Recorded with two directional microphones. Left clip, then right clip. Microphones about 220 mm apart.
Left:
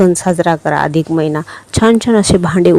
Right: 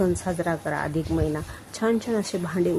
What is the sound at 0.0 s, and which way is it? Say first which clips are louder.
A woman's voice: left 14 dB; 40° left (ahead or behind).